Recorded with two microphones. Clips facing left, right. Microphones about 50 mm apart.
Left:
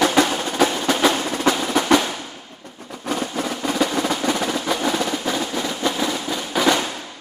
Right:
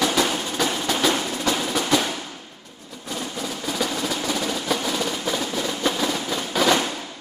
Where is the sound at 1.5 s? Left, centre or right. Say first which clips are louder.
Left 5 dB; left.